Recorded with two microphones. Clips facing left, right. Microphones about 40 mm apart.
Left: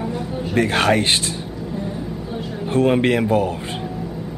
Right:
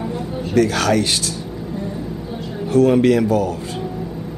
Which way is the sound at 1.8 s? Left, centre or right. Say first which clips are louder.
Right 1 dB; centre.